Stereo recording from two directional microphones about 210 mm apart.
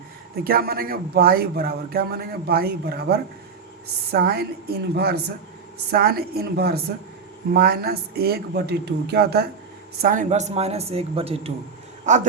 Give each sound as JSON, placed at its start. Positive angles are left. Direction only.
{"t": 0.4, "sound": "speech", "side_deg": -45}
{"t": 10.0, "sound": "speech", "side_deg": -40}